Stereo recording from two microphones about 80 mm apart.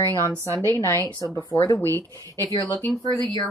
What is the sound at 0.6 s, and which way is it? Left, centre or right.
A woman's voice, left.